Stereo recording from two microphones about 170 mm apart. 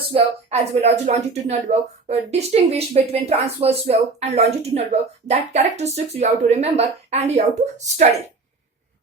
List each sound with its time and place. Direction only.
0.1 s speech: 40° right (ahead or behind)